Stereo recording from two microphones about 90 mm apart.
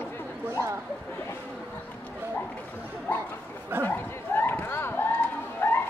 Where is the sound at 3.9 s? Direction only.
20° left (ahead or behind).